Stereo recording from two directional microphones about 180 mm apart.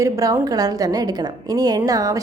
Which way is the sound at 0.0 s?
20° right (ahead or behind).